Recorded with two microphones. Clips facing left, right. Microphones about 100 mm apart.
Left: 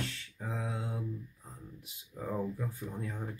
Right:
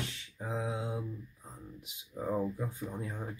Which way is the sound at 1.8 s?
20° right (ahead or behind).